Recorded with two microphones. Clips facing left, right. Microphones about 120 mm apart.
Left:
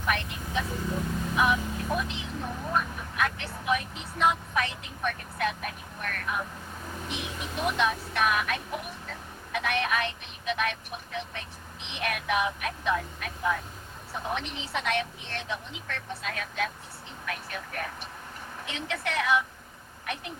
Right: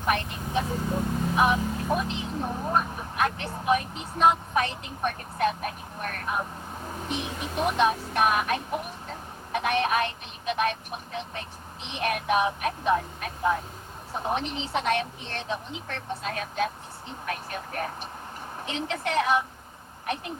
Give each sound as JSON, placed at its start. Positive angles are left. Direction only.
{"t": 0.5, "sound": "speech", "side_deg": -35}